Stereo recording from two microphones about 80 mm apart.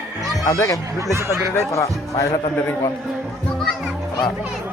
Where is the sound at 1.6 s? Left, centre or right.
Left.